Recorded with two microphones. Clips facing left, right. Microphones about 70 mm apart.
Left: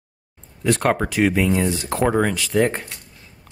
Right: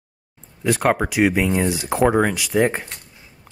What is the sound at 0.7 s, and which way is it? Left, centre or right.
Speech, centre.